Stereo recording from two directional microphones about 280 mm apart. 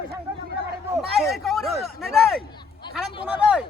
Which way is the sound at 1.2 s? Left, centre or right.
Centre.